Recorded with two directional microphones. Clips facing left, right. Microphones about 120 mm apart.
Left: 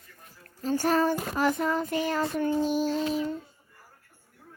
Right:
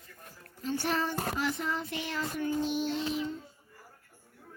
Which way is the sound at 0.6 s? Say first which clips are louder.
Left 7 dB; 40° left (ahead or behind).